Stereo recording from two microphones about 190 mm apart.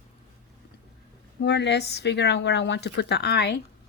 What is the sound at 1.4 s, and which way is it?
A woman's voice, 65° left (ahead or behind).